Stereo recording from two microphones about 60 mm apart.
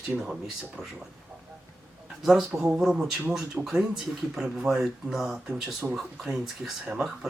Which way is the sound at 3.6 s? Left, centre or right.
Centre.